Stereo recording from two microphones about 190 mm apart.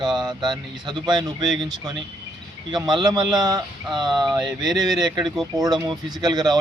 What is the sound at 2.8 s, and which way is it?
Speech, 20° right (ahead or behind).